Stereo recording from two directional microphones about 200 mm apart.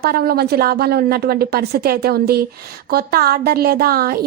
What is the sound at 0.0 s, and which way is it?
A woman's voice, 50° right (ahead or behind).